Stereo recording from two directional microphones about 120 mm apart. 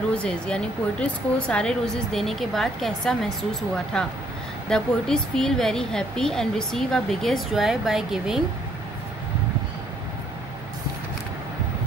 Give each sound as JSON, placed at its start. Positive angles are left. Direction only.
{"t": 0.1, "sound": "speech", "side_deg": 10}